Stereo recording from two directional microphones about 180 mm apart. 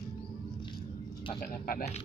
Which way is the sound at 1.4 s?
55° left (ahead or behind).